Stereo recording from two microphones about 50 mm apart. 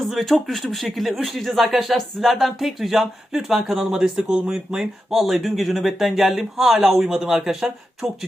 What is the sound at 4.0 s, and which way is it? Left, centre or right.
Speech, centre.